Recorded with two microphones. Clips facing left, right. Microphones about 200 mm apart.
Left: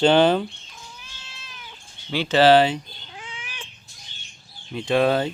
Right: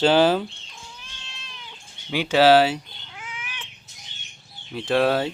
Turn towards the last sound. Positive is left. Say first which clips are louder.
# left 1 dB
turn(degrees=-5)  # may be behind; listen again after turning